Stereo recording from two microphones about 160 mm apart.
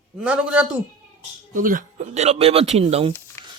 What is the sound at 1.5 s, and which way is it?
Speech, 55° right (ahead or behind).